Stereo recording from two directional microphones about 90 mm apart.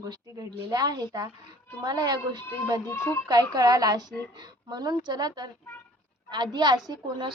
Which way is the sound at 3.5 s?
45° right (ahead or behind).